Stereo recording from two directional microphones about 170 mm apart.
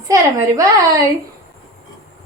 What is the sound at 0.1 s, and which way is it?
Speech, 20° right (ahead or behind).